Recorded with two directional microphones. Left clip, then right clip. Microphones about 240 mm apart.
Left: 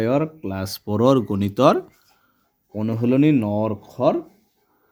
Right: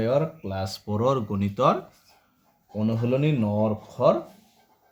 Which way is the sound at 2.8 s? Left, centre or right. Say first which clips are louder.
Left 6 dB; left.